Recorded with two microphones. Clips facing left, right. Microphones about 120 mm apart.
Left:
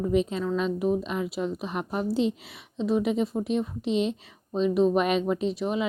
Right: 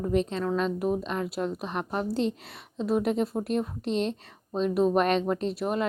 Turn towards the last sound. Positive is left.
turn(degrees=0)  # may be behind; listen again after turning